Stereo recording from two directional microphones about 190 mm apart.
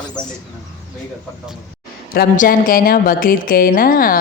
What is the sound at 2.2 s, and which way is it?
A woman's voice, 45° left (ahead or behind).